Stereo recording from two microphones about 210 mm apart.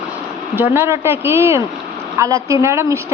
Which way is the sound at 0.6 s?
10° right (ahead or behind).